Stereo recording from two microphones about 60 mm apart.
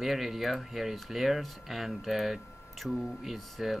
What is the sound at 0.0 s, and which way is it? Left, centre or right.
Speech, centre.